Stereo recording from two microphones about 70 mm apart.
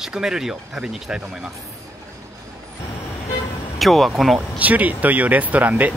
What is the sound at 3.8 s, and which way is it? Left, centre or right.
Speech, centre.